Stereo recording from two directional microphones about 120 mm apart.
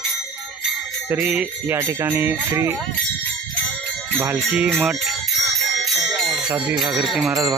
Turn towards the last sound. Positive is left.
turn(degrees=-5)  # may be behind; listen again after turning